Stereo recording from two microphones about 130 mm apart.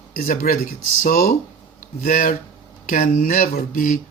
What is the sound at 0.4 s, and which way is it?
Speech, 90° left.